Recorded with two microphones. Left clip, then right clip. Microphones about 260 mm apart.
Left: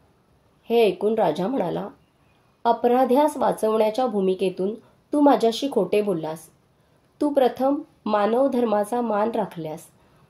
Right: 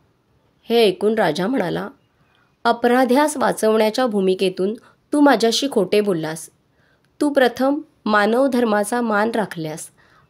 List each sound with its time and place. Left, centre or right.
0.7 s speech: right